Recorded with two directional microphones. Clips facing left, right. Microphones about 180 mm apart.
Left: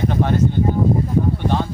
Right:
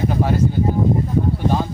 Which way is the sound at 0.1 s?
5° right (ahead or behind).